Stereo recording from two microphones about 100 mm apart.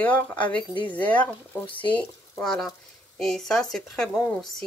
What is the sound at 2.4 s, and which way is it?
Speech, 5° left (ahead or behind).